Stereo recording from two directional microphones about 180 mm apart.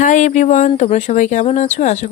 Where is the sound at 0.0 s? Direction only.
40° left (ahead or behind).